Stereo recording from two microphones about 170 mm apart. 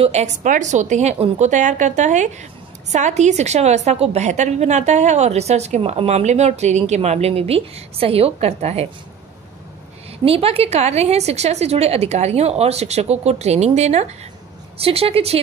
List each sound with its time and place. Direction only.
0.0 s a woman's voice: 40° right (ahead or behind)
10.2 s a woman's voice: 35° right (ahead or behind)